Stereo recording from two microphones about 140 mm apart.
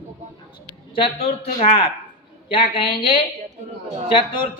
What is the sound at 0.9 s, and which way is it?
A woman's voice, 40° left (ahead or behind).